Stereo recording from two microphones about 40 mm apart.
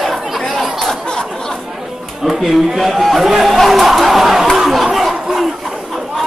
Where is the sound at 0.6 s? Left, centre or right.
Centre.